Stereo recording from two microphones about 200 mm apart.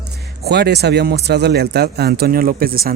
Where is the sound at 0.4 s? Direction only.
55° right (ahead or behind).